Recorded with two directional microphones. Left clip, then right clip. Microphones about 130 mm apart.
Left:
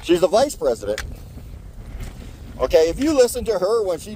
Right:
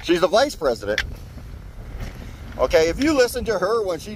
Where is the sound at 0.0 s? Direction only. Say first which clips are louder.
Left 1 dB; 25° left (ahead or behind).